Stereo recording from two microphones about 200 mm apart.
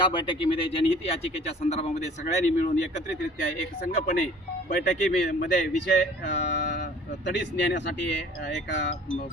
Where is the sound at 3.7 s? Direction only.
50° left (ahead or behind).